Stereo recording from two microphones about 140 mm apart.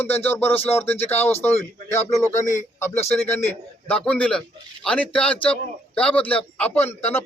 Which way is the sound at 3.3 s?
15° left (ahead or behind).